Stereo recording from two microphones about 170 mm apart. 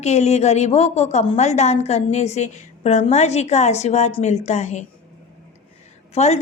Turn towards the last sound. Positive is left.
turn(degrees=40)  # may be behind; listen again after turning